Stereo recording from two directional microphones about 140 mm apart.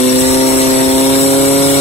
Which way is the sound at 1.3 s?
45° left (ahead or behind).